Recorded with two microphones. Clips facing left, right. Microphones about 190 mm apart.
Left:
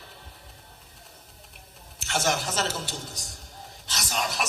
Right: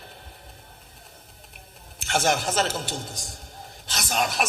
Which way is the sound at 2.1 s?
55° right (ahead or behind).